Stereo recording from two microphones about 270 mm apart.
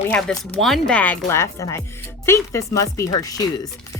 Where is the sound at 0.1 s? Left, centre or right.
Centre.